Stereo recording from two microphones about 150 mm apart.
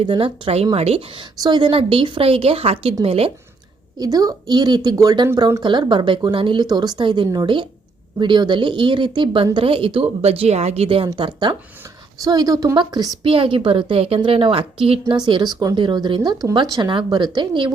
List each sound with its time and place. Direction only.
0.0 s a woman's voice: 35° right (ahead or behind)
3.9 s speech: 25° right (ahead or behind)
5.6 s a woman's voice: 30° right (ahead or behind)